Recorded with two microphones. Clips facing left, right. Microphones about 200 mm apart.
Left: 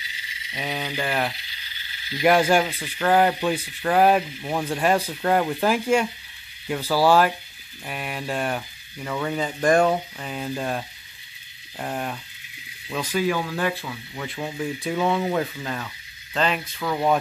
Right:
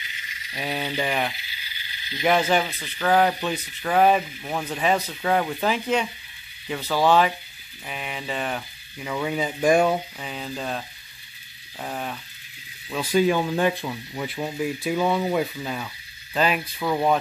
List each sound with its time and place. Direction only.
0.6 s speech: 5° right (ahead or behind)
1.1 s a sound: centre (ahead or behind); by 2.2 s 20° right (ahead or behind)
2.2 s speech: 10° left (ahead or behind)
13.1 s speech: 20° right (ahead or behind); by 17.2 s 5° right (ahead or behind)